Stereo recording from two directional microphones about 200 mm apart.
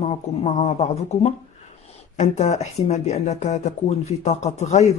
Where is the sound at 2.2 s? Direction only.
35° left (ahead or behind).